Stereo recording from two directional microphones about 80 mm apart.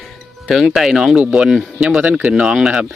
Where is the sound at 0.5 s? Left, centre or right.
Centre.